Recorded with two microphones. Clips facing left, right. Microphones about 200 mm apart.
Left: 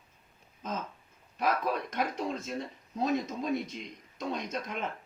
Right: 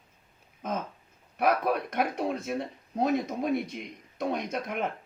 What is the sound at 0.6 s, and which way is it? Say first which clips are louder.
Speech: right 4 dB; 60° right (ahead or behind).